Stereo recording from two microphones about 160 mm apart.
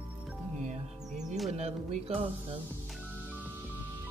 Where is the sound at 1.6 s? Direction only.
40° right (ahead or behind).